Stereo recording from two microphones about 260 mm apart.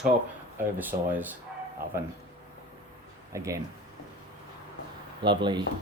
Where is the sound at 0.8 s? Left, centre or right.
Centre.